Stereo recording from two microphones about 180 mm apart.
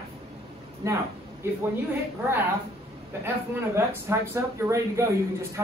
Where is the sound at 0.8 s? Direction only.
15° right (ahead or behind).